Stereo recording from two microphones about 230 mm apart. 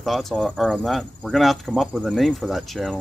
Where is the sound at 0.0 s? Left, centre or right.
Centre.